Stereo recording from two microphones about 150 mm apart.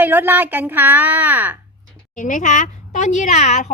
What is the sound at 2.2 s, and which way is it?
A woman's voice, 60° left (ahead or behind).